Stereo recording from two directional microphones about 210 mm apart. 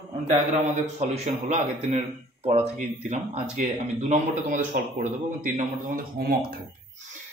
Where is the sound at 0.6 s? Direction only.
30° right (ahead or behind).